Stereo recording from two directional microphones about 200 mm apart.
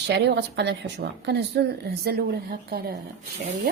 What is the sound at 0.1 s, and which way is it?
A woman's voice, 60° right (ahead or behind).